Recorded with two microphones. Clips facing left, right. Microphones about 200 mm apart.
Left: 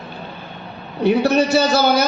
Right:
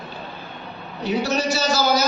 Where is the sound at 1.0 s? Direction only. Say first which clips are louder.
Left 7 dB; 60° left (ahead or behind).